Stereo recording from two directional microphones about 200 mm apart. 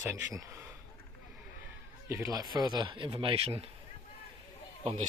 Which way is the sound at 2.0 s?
15° right (ahead or behind).